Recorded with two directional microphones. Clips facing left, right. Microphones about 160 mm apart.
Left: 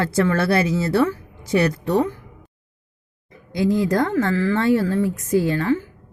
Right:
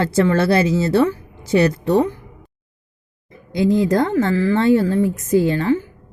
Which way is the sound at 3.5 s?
25° right (ahead or behind).